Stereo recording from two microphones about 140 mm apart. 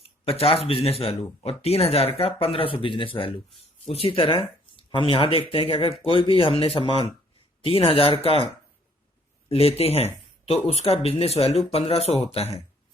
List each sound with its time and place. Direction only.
0.0 s speech: 45° left (ahead or behind)
9.5 s speech: 45° left (ahead or behind)